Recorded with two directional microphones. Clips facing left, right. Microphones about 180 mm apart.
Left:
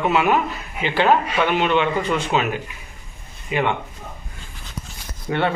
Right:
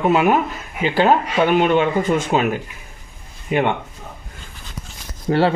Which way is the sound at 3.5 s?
50° right (ahead or behind).